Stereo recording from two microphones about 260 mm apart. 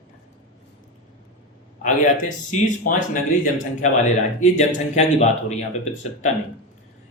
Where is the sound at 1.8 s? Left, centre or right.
Left.